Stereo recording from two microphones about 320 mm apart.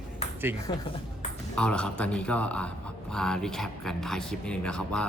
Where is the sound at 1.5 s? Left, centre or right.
Centre.